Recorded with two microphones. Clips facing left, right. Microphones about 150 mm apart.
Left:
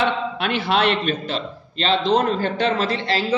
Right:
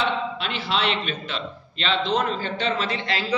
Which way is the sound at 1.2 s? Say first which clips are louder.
Left 5 dB; 40° left (ahead or behind).